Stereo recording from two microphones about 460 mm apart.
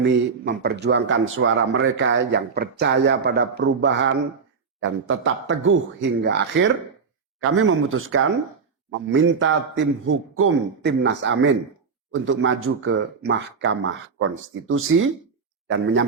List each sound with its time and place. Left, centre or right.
0.0 s speech: right